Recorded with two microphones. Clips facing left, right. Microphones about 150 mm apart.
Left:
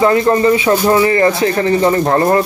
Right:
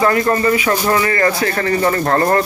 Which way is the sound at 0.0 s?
20° left (ahead or behind).